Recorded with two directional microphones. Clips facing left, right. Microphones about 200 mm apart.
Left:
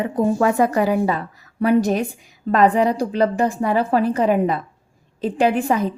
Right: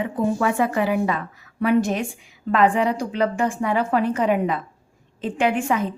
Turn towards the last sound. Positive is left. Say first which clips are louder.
# left 3 dB
turn(degrees=35)  # may be behind; listen again after turning